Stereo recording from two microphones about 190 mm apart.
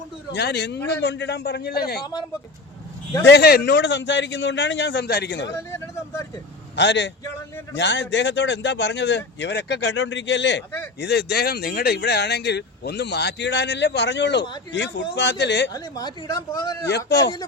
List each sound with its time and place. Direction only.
0.3 s speech: 60° left (ahead or behind)
3.2 s speech: 60° left (ahead or behind)
5.5 s vehicle: 15° left (ahead or behind)
6.7 s speech: 70° left (ahead or behind)
15.7 s speech: 20° left (ahead or behind)
17.1 s speech: 60° left (ahead or behind)